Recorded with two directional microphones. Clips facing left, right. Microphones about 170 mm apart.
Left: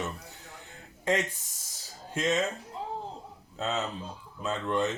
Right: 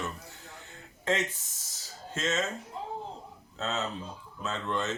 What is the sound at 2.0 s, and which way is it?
Speech, 15° left (ahead or behind).